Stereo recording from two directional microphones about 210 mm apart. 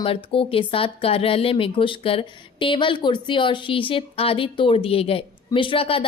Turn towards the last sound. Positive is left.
turn(degrees=25)  # may be behind; listen again after turning